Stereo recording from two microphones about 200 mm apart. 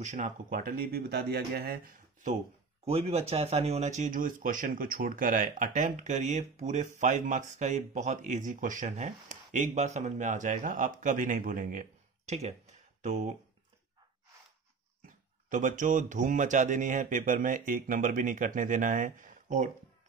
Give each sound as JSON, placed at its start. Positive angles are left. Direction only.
{"t": 0.0, "sound": "speech", "side_deg": -40}
{"t": 2.8, "sound": "speech", "side_deg": -30}
{"t": 15.0, "sound": "speech", "side_deg": -40}